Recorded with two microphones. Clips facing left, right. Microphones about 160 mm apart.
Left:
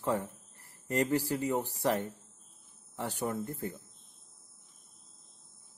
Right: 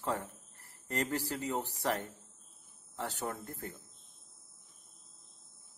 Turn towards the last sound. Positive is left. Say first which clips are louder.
# left 7 dB
turn(degrees=15)  # may be behind; listen again after turning